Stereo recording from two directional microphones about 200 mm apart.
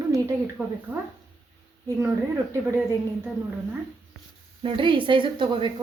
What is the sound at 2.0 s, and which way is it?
Speech, 10° right (ahead or behind).